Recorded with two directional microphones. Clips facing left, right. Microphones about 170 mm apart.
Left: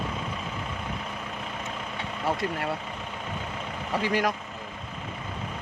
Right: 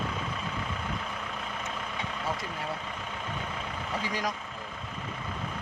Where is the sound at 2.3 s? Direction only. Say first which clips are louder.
Left 6 dB; 70° left (ahead or behind).